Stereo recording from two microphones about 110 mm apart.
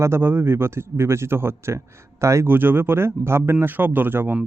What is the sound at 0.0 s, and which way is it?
Speech, 20° right (ahead or behind).